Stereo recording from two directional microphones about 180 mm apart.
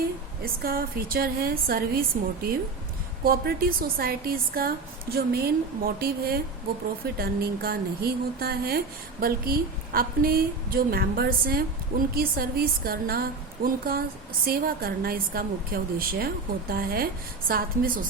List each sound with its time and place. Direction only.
0.4 s a woman's voice: 55° right (ahead or behind)